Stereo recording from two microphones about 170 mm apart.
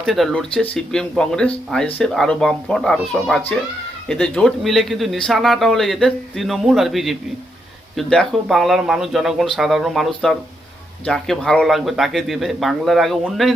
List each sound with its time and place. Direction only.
0.0 s a man's voice: centre (ahead or behind)